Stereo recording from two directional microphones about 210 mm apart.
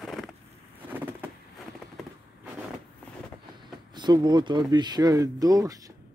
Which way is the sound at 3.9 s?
20° right (ahead or behind).